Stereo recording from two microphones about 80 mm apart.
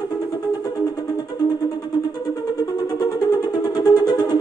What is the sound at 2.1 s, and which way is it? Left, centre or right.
Music, left.